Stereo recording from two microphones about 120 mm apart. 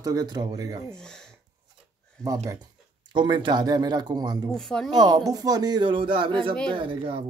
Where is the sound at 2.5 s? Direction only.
35° right (ahead or behind).